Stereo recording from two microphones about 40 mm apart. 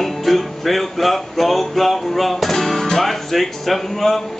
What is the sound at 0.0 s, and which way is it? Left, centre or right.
Music, centre.